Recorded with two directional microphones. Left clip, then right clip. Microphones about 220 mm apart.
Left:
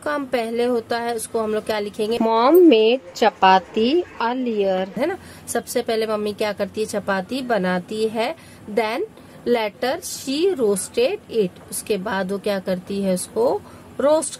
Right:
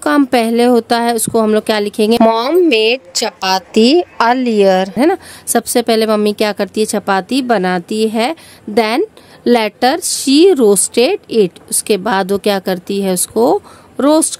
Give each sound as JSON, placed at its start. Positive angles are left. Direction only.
{"t": 0.0, "sound": "a woman's voice", "side_deg": -55}